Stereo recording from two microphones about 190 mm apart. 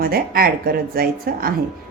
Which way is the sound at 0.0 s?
50° right (ahead or behind).